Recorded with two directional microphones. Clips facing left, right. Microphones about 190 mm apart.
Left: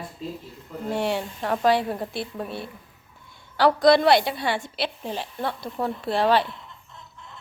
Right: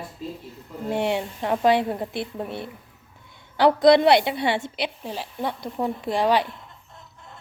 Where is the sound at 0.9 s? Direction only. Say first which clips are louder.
Right 2 dB; 20° right (ahead or behind).